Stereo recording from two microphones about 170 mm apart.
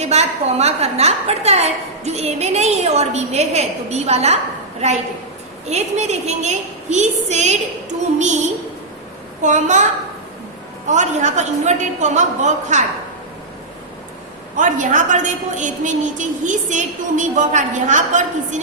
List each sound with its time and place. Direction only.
0.0 s a woman's voice: 40° right (ahead or behind)
9.4 s a woman's voice: 45° right (ahead or behind)
10.8 s a woman's voice: 45° right (ahead or behind)
14.5 s a woman's voice: 50° right (ahead or behind)